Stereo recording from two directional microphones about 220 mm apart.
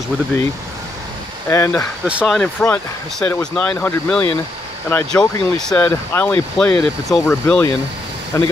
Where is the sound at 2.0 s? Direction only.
Centre (ahead or behind).